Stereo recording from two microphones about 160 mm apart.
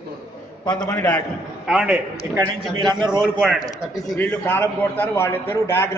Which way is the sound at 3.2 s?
Centre (ahead or behind).